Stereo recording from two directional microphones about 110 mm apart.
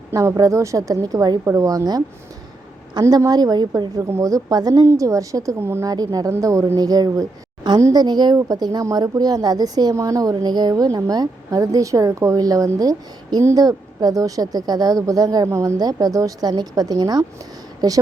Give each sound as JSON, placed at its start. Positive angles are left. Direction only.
{"t": 0.1, "sound": "speech", "side_deg": -30}
{"t": 7.8, "sound": "a woman's voice", "side_deg": -30}
{"t": 8.0, "sound": "speech", "side_deg": -40}